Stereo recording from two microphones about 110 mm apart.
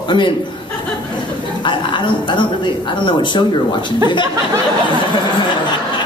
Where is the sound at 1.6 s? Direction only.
45° left (ahead or behind).